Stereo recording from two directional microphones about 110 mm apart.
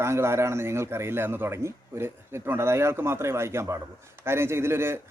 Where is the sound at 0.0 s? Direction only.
25° right (ahead or behind).